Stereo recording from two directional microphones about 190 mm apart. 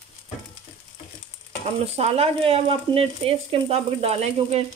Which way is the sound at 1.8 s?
35° right (ahead or behind).